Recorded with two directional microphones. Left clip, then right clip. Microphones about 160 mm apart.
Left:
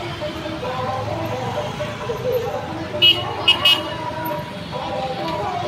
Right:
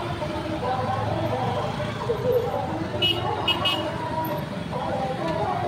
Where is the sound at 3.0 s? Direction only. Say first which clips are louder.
Left 9 dB; 60° right (ahead or behind).